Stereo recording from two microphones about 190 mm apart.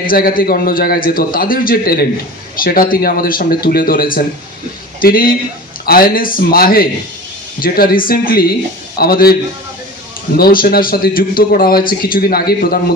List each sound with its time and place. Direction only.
0.0 s a man's voice: 50° left (ahead or behind)